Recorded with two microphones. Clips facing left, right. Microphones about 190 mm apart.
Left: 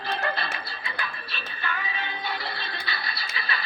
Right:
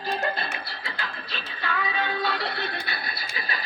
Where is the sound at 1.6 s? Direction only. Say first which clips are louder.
Right 5 dB; 90° right; by 3.6 s 45° right (ahead or behind).